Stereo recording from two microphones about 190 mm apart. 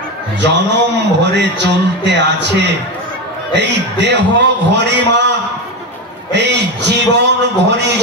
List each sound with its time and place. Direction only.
0.4 s a man's voice: 65° right (ahead or behind)
6.3 s a man's voice: 65° right (ahead or behind)